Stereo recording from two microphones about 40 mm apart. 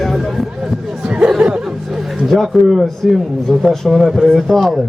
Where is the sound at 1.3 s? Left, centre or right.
Right.